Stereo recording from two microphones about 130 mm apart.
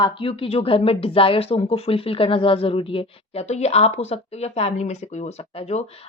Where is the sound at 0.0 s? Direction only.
40° left (ahead or behind).